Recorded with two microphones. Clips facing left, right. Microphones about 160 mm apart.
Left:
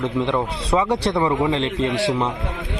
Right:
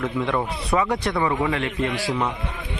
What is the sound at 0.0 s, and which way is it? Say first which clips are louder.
A man's voice: left 3 dB; 20° left (ahead or behind).